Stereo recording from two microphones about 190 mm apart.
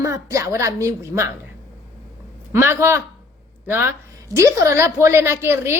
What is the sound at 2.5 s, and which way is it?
Speech, 15° right (ahead or behind).